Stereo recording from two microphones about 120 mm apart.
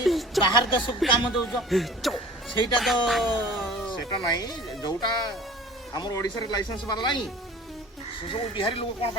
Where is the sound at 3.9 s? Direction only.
35° left (ahead or behind).